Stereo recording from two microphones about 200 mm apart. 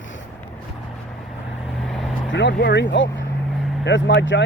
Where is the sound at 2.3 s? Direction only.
60° left (ahead or behind).